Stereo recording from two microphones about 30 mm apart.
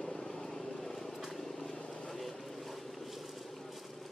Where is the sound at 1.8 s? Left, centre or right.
Left.